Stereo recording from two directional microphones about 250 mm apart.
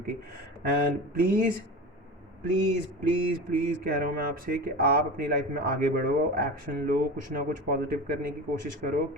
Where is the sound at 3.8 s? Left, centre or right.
Right.